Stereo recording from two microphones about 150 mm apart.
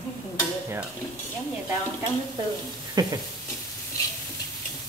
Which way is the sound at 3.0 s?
25° right (ahead or behind).